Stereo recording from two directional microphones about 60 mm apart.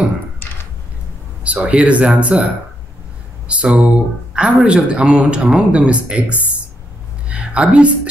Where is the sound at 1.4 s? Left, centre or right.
Right.